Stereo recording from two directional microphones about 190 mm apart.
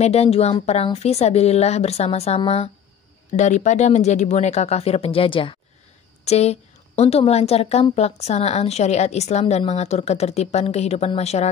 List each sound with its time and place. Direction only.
0.0 s a woman's voice: 35° left (ahead or behind)